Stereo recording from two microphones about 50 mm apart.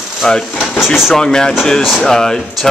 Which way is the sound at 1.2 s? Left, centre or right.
Centre.